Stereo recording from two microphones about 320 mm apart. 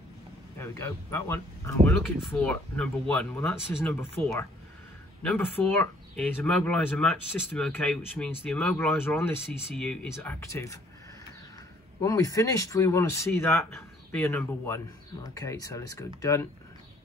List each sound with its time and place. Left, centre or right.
0.6 s speech: centre
12.0 s speech: centre